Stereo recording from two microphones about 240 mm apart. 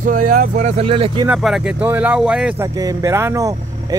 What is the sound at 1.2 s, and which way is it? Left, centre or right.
Speech, centre.